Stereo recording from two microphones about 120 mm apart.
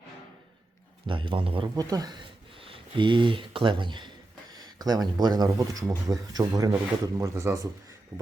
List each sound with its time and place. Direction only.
1.0 s a man's voice: 45° right (ahead or behind)
1.7 s a man's voice: 30° right (ahead or behind)